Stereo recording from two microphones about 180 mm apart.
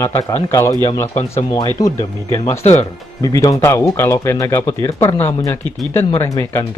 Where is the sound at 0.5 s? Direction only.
15° left (ahead or behind).